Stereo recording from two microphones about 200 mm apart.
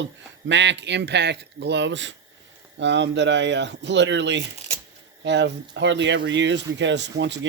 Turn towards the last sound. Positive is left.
turn(degrees=-60)  # may be behind; listen again after turning